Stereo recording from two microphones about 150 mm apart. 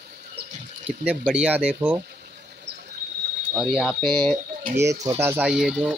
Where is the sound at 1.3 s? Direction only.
10° right (ahead or behind).